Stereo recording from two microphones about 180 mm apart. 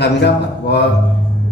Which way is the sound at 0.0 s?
70° left (ahead or behind).